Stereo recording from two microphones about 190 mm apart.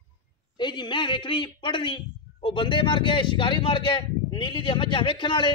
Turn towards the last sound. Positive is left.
turn(degrees=25)  # may be behind; listen again after turning